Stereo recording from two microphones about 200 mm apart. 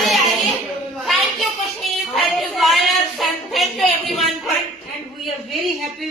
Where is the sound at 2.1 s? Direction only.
Centre (ahead or behind).